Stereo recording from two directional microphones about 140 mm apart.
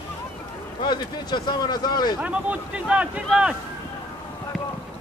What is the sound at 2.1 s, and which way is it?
Speech, 10° right (ahead or behind).